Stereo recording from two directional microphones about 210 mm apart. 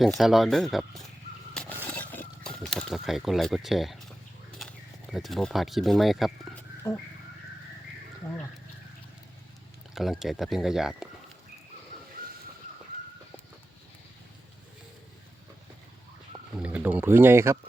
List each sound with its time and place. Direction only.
0.2 s speech: centre (ahead or behind)
1.9 s a sound: 5° left (ahead or behind)
5.1 s speech: centre (ahead or behind)
6.8 s a sound: 15° left (ahead or behind)
9.9 s speech: centre (ahead or behind)
16.3 s speech: 5° right (ahead or behind)